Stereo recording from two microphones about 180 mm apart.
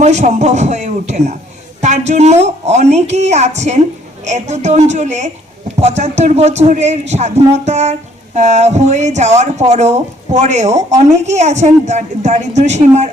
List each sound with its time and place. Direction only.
0.0 s speech: 40° right (ahead or behind)